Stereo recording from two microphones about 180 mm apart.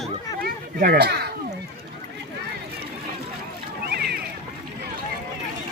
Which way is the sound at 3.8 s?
60° right (ahead or behind).